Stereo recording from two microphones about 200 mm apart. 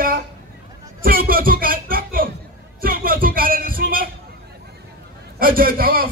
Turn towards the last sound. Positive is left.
turn(degrees=-45)  # may be behind; listen again after turning